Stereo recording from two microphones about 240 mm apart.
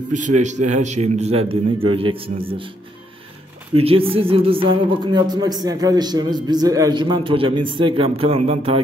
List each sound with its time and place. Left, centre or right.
0.4 s speech: right
3.7 s speech: right